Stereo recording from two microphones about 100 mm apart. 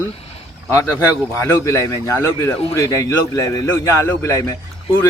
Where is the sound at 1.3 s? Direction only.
25° left (ahead or behind).